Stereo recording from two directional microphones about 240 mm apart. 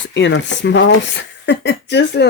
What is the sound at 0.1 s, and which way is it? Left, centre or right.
Speech, left.